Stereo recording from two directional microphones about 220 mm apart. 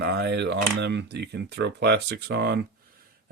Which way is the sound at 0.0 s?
50° right (ahead or behind).